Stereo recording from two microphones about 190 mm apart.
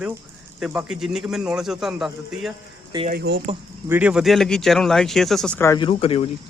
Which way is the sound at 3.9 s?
5° right (ahead or behind).